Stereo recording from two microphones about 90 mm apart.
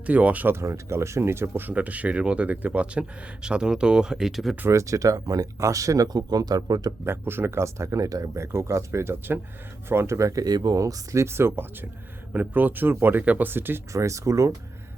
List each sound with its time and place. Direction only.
0.0 s speech: 15° right (ahead or behind)
4.6 s speech: 35° right (ahead or behind)
7.0 s speech: 25° right (ahead or behind)
13.9 s speech: 35° right (ahead or behind)